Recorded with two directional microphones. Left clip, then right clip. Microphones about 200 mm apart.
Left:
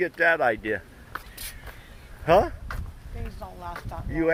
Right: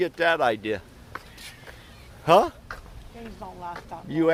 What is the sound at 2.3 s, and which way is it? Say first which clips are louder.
Speech: right 2 dB; 10° right (ahead or behind).